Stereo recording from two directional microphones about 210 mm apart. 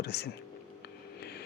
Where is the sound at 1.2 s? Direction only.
50° left (ahead or behind).